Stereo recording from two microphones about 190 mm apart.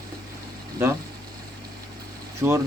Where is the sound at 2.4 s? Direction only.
15° right (ahead or behind).